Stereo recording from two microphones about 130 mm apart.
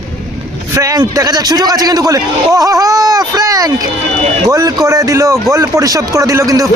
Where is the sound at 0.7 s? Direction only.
25° right (ahead or behind).